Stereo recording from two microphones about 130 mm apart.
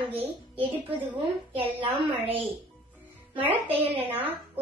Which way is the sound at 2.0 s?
45° right (ahead or behind).